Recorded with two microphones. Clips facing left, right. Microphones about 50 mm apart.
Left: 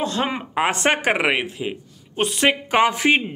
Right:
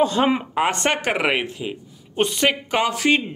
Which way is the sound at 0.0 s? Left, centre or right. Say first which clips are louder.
Right 5 dB; centre.